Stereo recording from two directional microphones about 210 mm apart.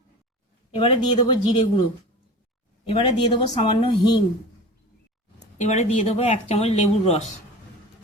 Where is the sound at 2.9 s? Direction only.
25° left (ahead or behind).